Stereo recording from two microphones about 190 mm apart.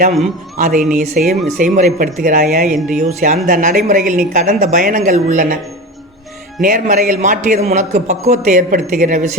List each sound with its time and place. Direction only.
0.6 s speech: 45° right (ahead or behind)
2.6 s speech: 5° right (ahead or behind)
3.0 s speech: 40° right (ahead or behind)
6.6 s a man's voice: 45° right (ahead or behind)